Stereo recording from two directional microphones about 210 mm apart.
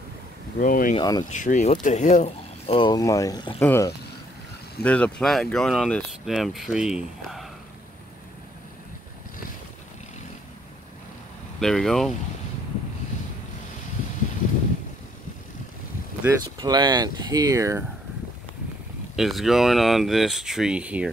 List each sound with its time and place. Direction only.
0.6 s speech: 40° left (ahead or behind)
0.9 s speech: 20° left (ahead or behind)
1.3 s speech: 35° left (ahead or behind); by 7.4 s centre (ahead or behind)
11.6 s speech: centre (ahead or behind)
16.2 s speech: 20° right (ahead or behind)
19.1 s speech: centre (ahead or behind)